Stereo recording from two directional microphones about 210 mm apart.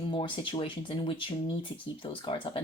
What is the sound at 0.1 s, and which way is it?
Speech, 25° left (ahead or behind).